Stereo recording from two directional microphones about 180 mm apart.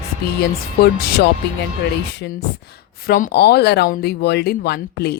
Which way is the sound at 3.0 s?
55° left (ahead or behind).